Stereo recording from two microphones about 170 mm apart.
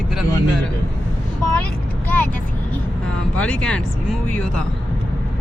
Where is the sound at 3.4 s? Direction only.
5° left (ahead or behind).